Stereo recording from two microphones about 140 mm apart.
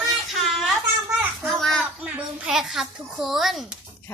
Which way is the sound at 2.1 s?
5° right (ahead or behind).